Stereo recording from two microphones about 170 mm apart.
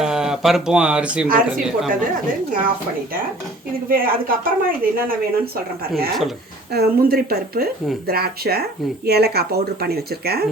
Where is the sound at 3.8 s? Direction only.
55° right (ahead or behind).